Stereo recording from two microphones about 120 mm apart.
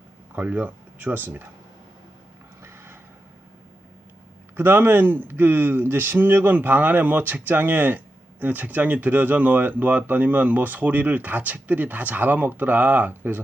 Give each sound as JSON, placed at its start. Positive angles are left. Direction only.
{"t": 0.3, "sound": "speech", "side_deg": -15}
{"t": 2.6, "sound": "a sound", "side_deg": -20}
{"t": 4.5, "sound": "speech", "side_deg": -15}